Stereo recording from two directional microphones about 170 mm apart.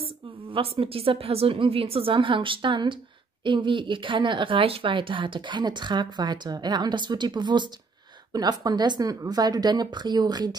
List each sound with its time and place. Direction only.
0.0 s a woman's voice: 30° right (ahead or behind)